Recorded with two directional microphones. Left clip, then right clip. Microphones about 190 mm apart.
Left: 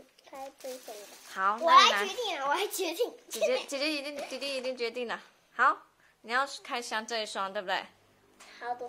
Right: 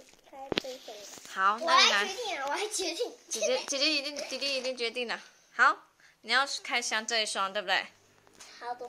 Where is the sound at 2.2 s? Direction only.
55° left (ahead or behind).